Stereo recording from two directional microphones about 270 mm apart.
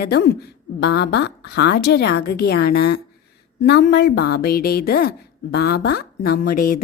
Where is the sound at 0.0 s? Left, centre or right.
Left.